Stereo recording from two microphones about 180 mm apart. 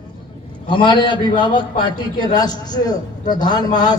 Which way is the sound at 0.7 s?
25° left (ahead or behind).